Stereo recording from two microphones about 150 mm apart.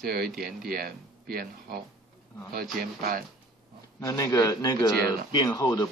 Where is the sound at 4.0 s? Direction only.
25° left (ahead or behind).